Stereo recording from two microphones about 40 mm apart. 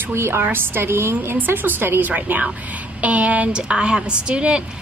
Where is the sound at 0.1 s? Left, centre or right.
Right.